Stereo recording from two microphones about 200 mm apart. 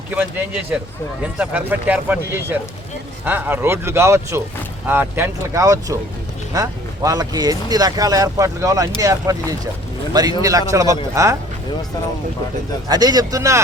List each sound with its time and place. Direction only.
1.2 s speech: 5° right (ahead or behind)
12.9 s speech: 20° right (ahead or behind)